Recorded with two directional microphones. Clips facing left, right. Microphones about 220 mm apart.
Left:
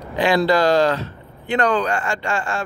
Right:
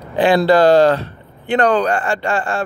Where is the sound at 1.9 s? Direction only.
55° right (ahead or behind).